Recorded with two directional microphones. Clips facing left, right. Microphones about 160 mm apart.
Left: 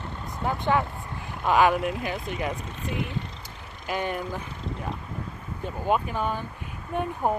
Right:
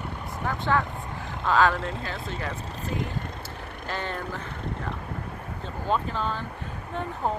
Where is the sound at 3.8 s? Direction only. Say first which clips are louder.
Left 4 dB; 15° left (ahead or behind).